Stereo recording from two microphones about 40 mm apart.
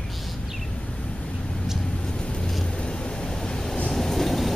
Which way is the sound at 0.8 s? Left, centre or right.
Left.